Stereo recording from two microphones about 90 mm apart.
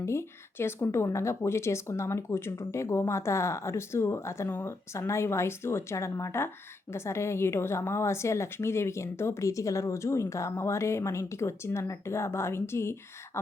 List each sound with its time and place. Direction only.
0.0 s a woman's voice: 30° left (ahead or behind)